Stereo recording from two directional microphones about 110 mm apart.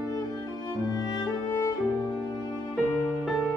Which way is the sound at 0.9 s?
35° left (ahead or behind).